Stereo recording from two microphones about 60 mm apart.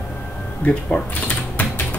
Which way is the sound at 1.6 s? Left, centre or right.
Left.